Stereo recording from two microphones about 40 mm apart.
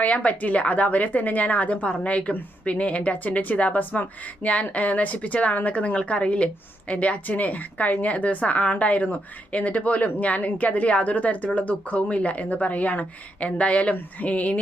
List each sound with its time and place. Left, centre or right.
0.0 s speech: left